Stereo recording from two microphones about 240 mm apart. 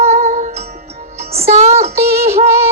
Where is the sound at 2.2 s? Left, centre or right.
Right.